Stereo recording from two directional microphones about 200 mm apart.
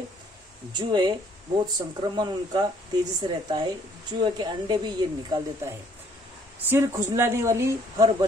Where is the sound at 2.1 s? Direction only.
20° right (ahead or behind).